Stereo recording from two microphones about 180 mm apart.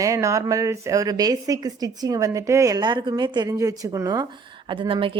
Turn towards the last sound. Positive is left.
turn(degrees=-30)  # may be behind; listen again after turning